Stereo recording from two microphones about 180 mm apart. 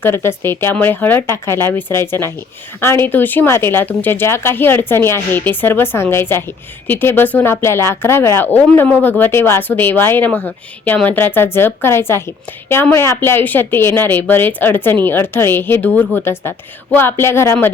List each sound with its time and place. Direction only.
0.0 s speech: 15° left (ahead or behind)